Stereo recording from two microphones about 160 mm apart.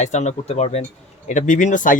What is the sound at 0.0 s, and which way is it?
Speech, 45° left (ahead or behind).